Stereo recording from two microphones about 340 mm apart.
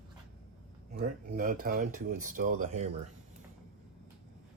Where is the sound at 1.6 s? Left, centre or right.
Right.